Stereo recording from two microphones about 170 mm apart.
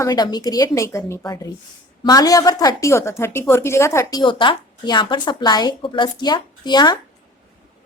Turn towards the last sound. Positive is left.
turn(degrees=25)  # may be behind; listen again after turning